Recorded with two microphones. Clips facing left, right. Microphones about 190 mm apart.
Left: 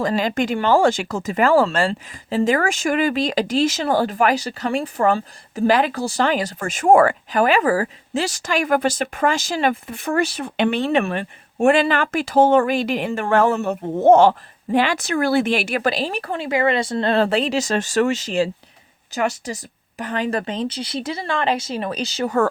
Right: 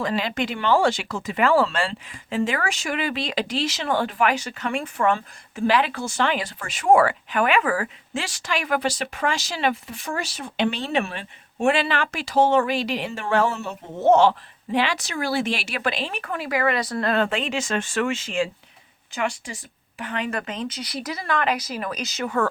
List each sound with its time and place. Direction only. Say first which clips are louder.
0.0 s speech: left 5 dB; 40° left (ahead or behind)